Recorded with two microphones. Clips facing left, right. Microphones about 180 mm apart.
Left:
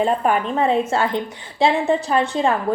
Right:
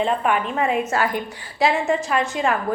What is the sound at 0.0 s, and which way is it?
A woman's voice, 40° left (ahead or behind).